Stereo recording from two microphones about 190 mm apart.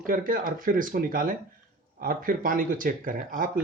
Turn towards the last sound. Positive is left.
turn(degrees=-45)  # may be behind; listen again after turning